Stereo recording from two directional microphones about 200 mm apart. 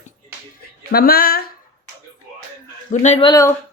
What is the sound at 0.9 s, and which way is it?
Speech, 50° left (ahead or behind).